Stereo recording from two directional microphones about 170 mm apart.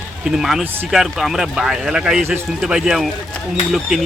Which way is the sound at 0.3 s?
Centre (ahead or behind).